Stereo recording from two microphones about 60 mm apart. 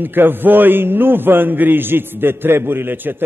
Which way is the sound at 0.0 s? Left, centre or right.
Right.